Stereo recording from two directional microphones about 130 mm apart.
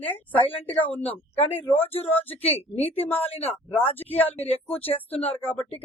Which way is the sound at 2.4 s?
50° left (ahead or behind).